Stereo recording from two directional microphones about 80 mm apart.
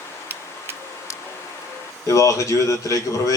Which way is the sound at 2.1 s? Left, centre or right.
Left.